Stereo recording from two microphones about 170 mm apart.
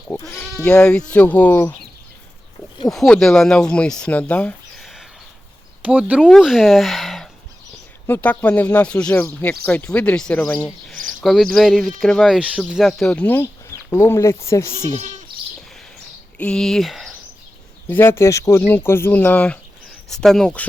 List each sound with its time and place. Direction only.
0.1 s speech: 10° left (ahead or behind)
2.9 s speech: centre (ahead or behind)
8.0 s speech: 10° left (ahead or behind)
14.9 s goat: 50° right (ahead or behind)
16.4 s speech: 5° left (ahead or behind)
17.8 s speech: 15° left (ahead or behind)